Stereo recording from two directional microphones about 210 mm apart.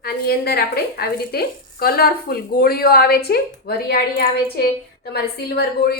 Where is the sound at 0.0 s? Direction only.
45° left (ahead or behind).